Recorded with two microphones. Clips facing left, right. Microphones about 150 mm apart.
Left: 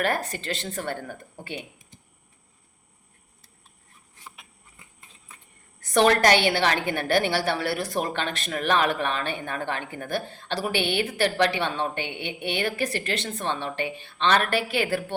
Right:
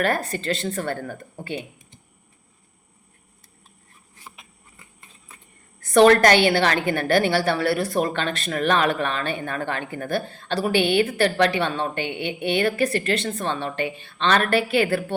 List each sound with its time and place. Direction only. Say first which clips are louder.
0.0 s speech: right 3 dB; 15° left (ahead or behind)
5.8 s speech: right 5 dB; 15° left (ahead or behind)
10.6 s a woman's voice: right 6 dB; 45° right (ahead or behind)
11.0 s speech: right 3 dB; 15° left (ahead or behind)